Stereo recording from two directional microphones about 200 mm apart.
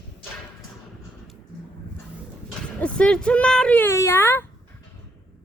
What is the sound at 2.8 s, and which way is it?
Speech, 5° left (ahead or behind).